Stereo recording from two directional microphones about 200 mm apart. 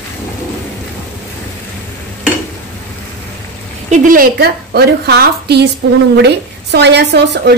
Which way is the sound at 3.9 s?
45° right (ahead or behind).